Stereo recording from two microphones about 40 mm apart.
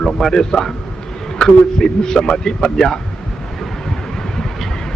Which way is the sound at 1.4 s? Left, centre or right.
Centre.